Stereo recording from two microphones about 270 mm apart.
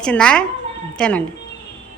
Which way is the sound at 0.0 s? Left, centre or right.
Centre.